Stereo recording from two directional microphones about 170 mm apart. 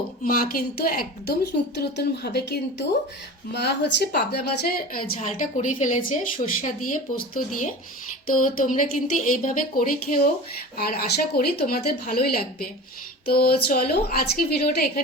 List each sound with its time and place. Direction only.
0.3 s a woman's voice: 60° left (ahead or behind); by 4.4 s 75° left (ahead or behind)
4.9 s speech: 60° left (ahead or behind)